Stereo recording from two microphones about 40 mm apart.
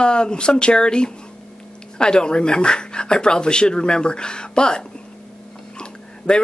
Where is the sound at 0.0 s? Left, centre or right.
Left.